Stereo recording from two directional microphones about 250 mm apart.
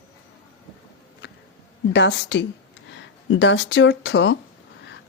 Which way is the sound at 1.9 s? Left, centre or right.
Left.